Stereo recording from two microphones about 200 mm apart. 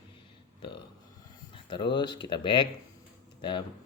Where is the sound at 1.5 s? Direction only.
25° left (ahead or behind).